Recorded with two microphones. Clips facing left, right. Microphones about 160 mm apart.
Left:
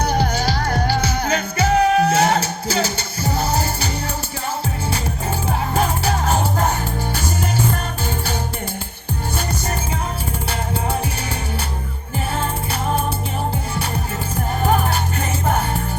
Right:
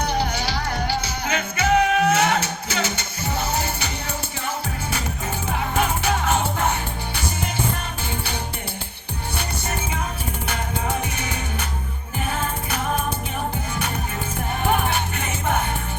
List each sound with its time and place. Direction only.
0.0 s music: 45° left (ahead or behind)
5.5 s music: 35° left (ahead or behind)
14.7 s music: 40° left (ahead or behind)